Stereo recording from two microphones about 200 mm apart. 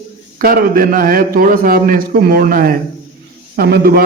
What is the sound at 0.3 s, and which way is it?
A man's voice, 45° right (ahead or behind).